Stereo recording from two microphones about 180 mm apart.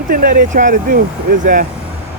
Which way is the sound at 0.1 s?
50° right (ahead or behind).